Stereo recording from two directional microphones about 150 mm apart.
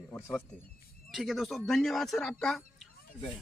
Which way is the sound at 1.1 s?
Centre (ahead or behind).